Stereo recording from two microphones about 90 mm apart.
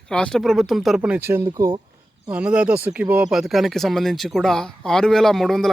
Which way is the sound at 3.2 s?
5° right (ahead or behind).